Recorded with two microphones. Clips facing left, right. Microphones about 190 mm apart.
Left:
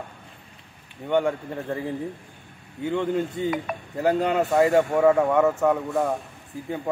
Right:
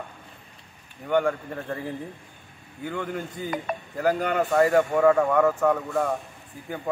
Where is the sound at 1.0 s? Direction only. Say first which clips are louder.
Left 1 dB; 25° left (ahead or behind).